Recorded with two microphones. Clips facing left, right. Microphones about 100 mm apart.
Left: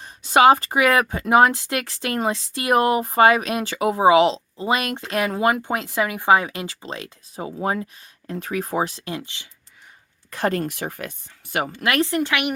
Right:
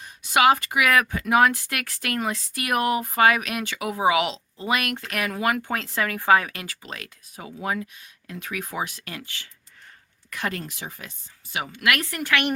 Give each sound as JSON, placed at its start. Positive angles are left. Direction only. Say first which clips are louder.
{"t": 0.0, "sound": "speech", "louder": "left 5 dB", "side_deg": 30}
{"t": 10.2, "sound": "speech", "louder": "left 7 dB", "side_deg": 35}
{"t": 10.6, "sound": "speech", "louder": "left 9 dB", "side_deg": 55}
{"t": 11.5, "sound": "speech", "louder": "left 6 dB", "side_deg": 45}
{"t": 11.8, "sound": "speech", "louder": "left 4 dB", "side_deg": 30}